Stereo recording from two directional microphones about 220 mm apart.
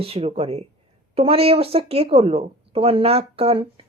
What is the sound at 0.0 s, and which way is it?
A woman's voice, 25° right (ahead or behind).